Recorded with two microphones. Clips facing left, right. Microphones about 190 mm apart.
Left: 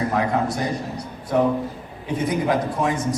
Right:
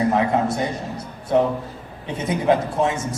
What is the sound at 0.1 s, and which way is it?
Speech, 25° right (ahead or behind).